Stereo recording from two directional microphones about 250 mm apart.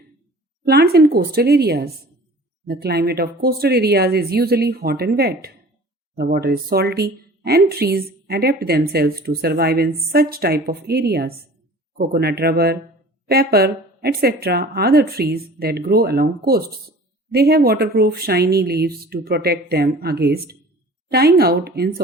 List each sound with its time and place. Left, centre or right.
0.6 s speech: right